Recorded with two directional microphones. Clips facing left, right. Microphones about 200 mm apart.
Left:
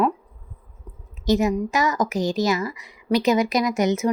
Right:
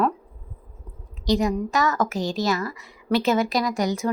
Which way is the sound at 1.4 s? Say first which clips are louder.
Left 1 dB; 20° left (ahead or behind).